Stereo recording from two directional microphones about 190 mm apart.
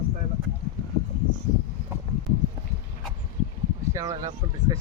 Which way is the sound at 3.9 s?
15° right (ahead or behind).